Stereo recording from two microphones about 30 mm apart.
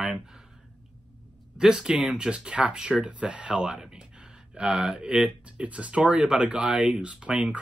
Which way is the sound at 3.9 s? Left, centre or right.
Right.